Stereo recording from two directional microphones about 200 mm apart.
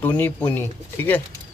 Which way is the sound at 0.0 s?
10° left (ahead or behind).